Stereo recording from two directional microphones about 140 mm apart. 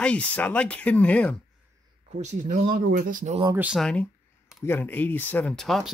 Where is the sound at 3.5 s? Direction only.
10° right (ahead or behind).